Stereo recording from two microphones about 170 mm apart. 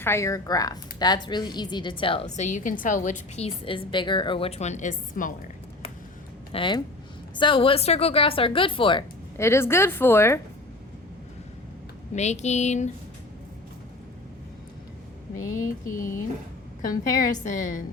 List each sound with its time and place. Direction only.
0.0 s a woman's voice: 15° left (ahead or behind); by 5.3 s 50° left (ahead or behind)
6.5 s a woman's voice: 30° left (ahead or behind)
9.4 s speech: 15° left (ahead or behind)
12.1 s a woman's voice: 40° left (ahead or behind)
15.8 s a woman's voice: 50° left (ahead or behind)